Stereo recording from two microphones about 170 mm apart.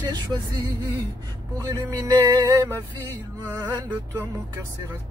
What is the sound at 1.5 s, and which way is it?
Music, 20° right (ahead or behind).